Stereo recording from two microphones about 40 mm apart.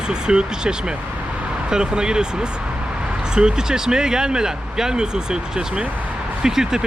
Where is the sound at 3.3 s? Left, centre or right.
Centre.